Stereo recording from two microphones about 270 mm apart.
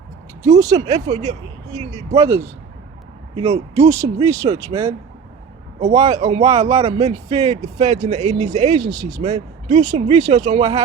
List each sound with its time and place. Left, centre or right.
0.6 s speech: centre
1.0 s speech: right
2.1 s speech: centre; by 8.7 s right
8.8 s speech: centre
9.2 s speech: right